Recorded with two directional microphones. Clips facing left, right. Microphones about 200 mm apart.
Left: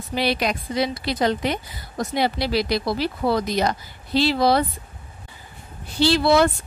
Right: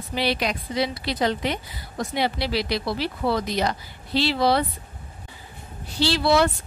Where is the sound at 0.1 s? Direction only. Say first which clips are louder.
Left 2 dB; 45° left (ahead or behind).